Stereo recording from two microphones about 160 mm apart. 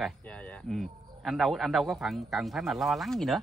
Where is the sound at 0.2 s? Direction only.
10° left (ahead or behind).